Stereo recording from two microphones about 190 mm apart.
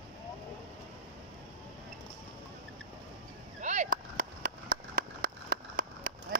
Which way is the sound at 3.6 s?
40° right (ahead or behind).